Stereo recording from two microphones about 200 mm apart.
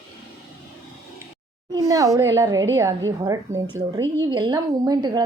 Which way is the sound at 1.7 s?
15° right (ahead or behind).